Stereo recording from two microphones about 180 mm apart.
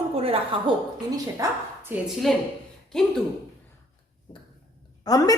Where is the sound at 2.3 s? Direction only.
Centre (ahead or behind).